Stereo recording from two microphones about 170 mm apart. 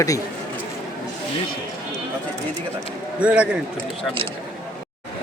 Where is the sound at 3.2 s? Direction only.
5° right (ahead or behind).